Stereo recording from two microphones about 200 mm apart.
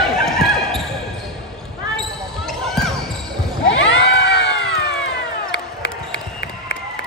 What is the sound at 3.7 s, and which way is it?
Crowd, 70° left (ahead or behind).